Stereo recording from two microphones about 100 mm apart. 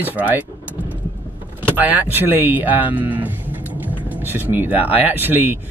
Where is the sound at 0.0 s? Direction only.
15° right (ahead or behind).